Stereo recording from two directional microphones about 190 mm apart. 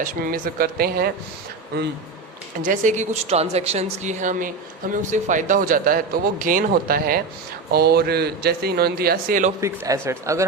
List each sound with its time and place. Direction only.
0.0 s speech: 50° right (ahead or behind)
2.6 s speech: 40° right (ahead or behind)
9.6 s speech: 15° right (ahead or behind)